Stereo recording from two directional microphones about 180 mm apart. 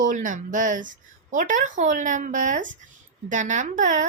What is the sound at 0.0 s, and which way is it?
Speech, 45° right (ahead or behind).